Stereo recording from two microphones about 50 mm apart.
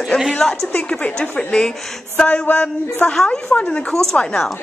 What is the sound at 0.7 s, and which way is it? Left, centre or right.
Speech, centre.